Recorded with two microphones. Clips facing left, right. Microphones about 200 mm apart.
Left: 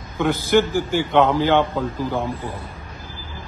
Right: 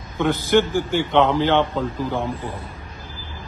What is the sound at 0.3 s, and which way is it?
A man's voice, 10° left (ahead or behind).